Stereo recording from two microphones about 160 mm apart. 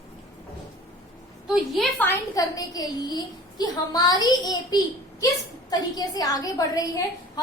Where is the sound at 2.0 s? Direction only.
20° left (ahead or behind).